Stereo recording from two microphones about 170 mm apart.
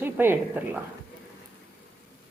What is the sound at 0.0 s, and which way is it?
Speech, 10° right (ahead or behind).